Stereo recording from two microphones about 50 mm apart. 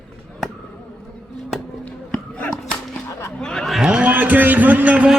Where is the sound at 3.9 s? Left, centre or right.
Right.